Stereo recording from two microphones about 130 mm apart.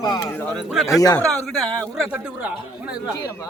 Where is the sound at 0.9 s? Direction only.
30° left (ahead or behind).